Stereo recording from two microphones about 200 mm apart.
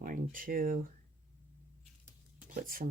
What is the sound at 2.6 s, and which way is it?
Speech, 45° right (ahead or behind).